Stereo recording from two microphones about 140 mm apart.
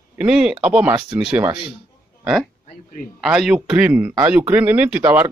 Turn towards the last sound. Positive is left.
turn(degrees=-15)  # may be behind; listen again after turning